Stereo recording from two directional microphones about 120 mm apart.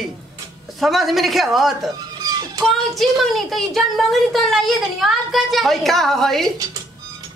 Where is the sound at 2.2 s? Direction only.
35° right (ahead or behind).